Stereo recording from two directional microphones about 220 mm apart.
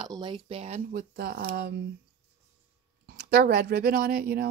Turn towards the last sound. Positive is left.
turn(degrees=-45)  # may be behind; listen again after turning